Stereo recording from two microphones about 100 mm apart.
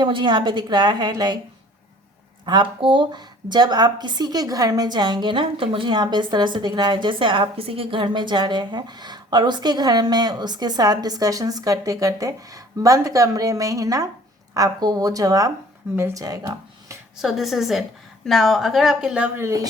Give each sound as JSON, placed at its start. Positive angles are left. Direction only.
{"t": 0.0, "sound": "a woman's voice", "side_deg": -50}
{"t": 2.5, "sound": "a woman's voice", "side_deg": -50}
{"t": 17.2, "sound": "speech", "side_deg": 0}
{"t": 19.4, "sound": "speech", "side_deg": -30}